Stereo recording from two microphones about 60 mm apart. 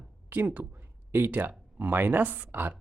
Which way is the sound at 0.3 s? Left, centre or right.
Right.